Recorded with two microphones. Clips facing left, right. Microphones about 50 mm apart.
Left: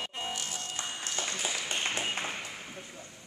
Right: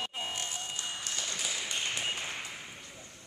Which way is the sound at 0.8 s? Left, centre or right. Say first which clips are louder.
Left 5 dB; left.